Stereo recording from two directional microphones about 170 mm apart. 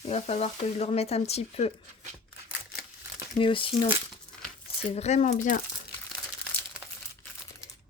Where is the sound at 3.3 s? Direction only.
30° left (ahead or behind).